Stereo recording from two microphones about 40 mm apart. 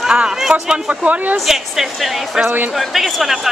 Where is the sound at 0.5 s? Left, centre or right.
Right.